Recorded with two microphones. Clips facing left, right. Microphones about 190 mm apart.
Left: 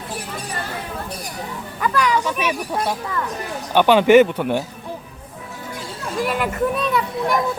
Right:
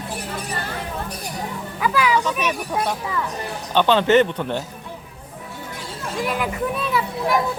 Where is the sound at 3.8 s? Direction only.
10° left (ahead or behind).